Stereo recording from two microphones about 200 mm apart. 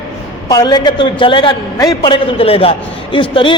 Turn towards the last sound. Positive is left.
turn(degrees=25)  # may be behind; listen again after turning